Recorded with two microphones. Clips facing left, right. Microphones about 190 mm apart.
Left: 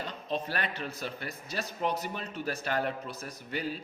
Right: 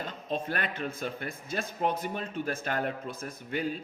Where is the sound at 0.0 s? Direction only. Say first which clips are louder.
Right 1 dB; 50° right (ahead or behind).